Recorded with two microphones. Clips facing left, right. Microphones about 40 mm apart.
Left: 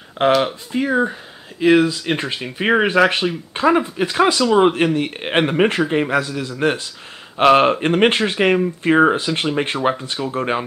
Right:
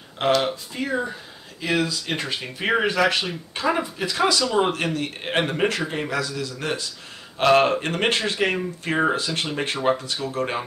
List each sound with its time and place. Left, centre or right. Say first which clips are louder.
0.2 s speech: left 5 dB; left